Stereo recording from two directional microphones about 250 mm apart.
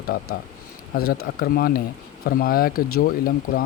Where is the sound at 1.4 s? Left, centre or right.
Left.